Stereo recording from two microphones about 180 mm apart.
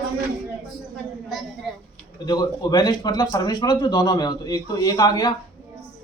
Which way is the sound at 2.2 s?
25° left (ahead or behind).